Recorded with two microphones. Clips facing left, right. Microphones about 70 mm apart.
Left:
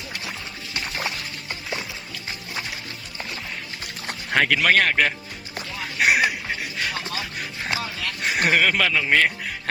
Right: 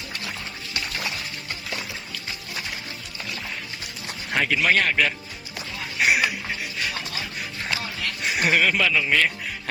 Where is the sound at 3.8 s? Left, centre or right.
Left.